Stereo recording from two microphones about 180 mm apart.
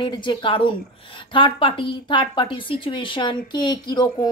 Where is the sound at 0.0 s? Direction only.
25° left (ahead or behind).